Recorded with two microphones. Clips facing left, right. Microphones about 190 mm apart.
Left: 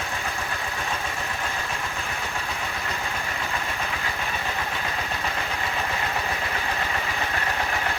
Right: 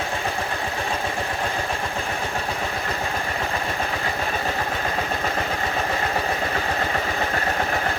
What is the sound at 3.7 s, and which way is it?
Vehicle, 40° right (ahead or behind).